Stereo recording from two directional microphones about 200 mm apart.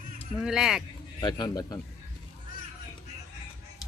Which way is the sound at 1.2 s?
20° left (ahead or behind).